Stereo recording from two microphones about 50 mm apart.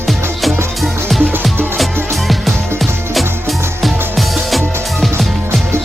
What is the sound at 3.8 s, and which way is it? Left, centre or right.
Music, centre.